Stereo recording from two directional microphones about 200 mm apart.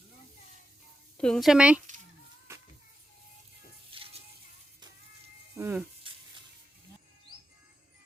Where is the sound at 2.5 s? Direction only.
15° right (ahead or behind).